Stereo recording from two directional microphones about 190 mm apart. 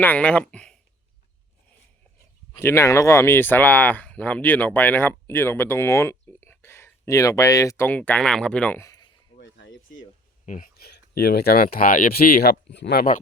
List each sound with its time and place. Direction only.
0.0 s speech: 10° left (ahead or behind)
2.6 s speech: 15° left (ahead or behind)
10.4 s speech: 45° left (ahead or behind)